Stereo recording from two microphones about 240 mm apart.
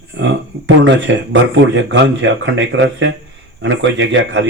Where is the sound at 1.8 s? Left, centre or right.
Right.